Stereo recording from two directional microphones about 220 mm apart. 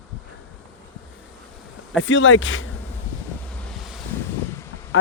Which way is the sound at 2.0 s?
60° left (ahead or behind).